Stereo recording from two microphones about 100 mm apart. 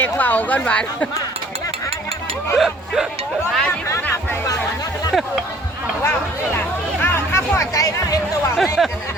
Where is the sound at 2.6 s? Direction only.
5° right (ahead or behind).